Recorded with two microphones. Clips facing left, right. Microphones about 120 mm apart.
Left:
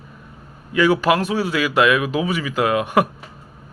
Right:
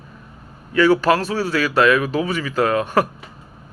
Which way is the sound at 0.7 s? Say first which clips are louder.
Right 1 dB; 15° left (ahead or behind).